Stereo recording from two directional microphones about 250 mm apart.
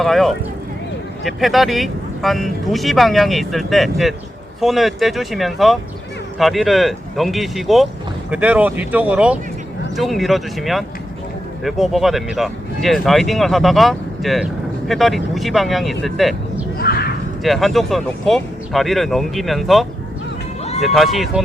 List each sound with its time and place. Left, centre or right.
0.0 s speech: centre
16.7 s a sound: left
17.4 s speech: centre